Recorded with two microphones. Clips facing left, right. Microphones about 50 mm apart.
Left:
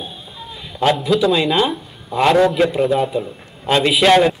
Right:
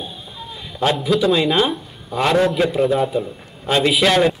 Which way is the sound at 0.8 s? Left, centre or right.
Centre.